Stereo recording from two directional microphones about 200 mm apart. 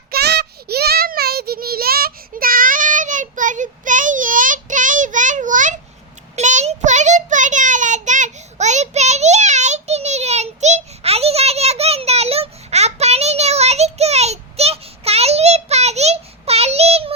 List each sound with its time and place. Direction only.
0.1 s child singing: 55° right (ahead or behind); by 17.2 s 30° right (ahead or behind)